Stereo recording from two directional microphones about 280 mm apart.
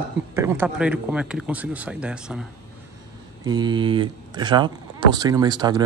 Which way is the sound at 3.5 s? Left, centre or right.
Centre.